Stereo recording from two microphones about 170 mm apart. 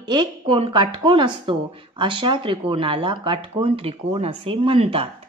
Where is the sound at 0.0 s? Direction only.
25° right (ahead or behind).